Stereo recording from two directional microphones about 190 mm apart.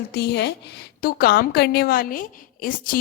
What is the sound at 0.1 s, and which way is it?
A woman's voice, 60° left (ahead or behind).